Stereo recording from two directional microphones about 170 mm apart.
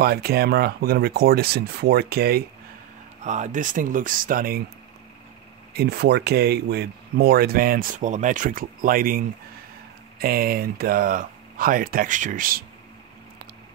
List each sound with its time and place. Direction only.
0.0 s speech: 65° right (ahead or behind)
3.3 s speech: 45° right (ahead or behind)
5.7 s speech: 70° right (ahead or behind)